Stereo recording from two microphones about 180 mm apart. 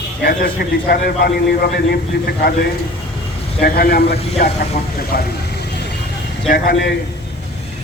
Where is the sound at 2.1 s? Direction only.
65° left (ahead or behind).